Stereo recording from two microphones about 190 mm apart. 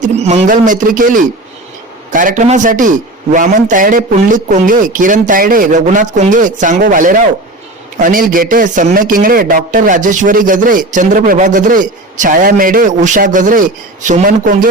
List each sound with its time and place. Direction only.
0.0 s a man's voice: 35° right (ahead or behind)